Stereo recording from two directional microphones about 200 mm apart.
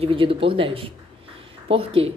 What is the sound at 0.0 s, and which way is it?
A woman's voice, 25° right (ahead or behind).